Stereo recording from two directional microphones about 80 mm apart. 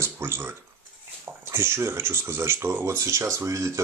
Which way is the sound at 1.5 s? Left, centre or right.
Right.